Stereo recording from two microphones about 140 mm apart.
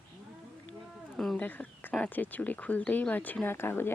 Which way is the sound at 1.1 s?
5° left (ahead or behind).